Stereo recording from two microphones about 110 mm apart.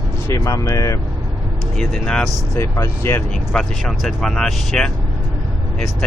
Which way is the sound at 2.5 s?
25° left (ahead or behind).